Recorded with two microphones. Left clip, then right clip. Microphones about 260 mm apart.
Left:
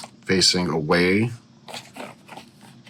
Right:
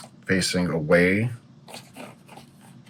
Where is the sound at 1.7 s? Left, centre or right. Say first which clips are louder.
Left 5 dB; centre.